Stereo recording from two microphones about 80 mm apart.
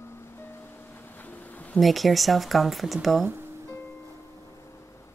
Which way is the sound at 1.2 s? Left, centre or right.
Centre.